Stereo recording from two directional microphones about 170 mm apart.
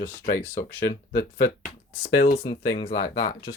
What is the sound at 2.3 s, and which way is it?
Speech, 35° left (ahead or behind).